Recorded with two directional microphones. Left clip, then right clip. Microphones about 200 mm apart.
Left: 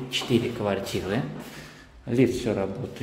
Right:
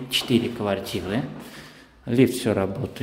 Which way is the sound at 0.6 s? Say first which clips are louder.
Right 1 dB; 10° right (ahead or behind).